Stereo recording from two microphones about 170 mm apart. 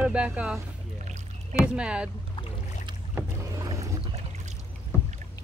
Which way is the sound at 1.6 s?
5° right (ahead or behind).